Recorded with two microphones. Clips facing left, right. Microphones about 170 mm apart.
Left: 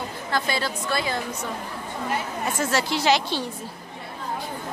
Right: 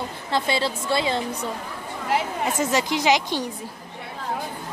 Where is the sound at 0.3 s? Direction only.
25° right (ahead or behind).